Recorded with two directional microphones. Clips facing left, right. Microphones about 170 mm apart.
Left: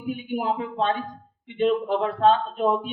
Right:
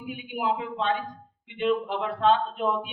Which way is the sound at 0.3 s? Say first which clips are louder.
Even; 40° left (ahead or behind).